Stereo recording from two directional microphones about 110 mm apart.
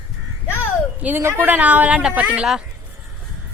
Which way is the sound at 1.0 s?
20° right (ahead or behind).